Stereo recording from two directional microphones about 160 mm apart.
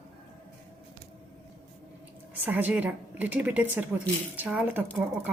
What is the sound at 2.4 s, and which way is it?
A woman's voice, 10° right (ahead or behind).